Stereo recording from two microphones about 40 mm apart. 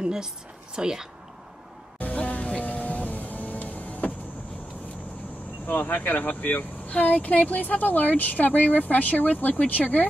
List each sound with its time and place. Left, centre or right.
0.0 s a woman's voice: centre
2.1 s vehicle: left
5.7 s speech: left